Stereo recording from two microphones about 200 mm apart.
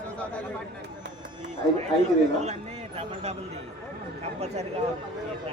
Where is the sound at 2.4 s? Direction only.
30° right (ahead or behind).